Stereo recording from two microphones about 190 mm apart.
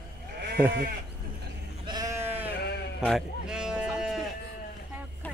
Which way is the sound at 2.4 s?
60° left (ahead or behind).